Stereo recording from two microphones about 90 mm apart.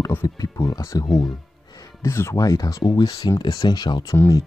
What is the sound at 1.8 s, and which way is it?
Speech, 30° left (ahead or behind).